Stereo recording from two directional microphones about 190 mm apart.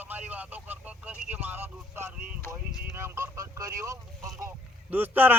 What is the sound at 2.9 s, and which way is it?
Speech, 15° right (ahead or behind).